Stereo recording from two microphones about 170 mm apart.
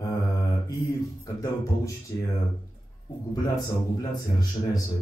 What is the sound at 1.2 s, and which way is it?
Speech, 20° left (ahead or behind).